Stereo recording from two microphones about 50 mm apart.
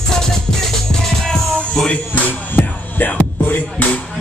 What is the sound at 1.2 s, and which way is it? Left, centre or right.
Music, centre.